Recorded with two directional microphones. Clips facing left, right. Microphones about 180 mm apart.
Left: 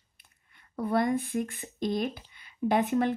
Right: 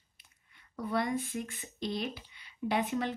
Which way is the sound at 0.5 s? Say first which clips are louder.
Left 5 dB; 50° left (ahead or behind).